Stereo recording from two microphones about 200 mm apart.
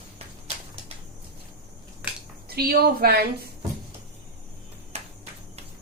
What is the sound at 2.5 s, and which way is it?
Speech, 50° right (ahead or behind).